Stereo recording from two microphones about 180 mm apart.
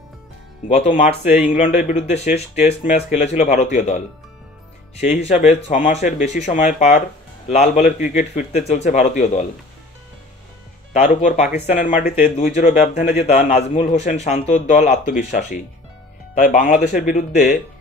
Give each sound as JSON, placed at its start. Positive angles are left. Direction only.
{"t": 0.7, "sound": "speech", "side_deg": 40}
{"t": 5.0, "sound": "speech", "side_deg": 40}
{"t": 10.9, "sound": "speech", "side_deg": 40}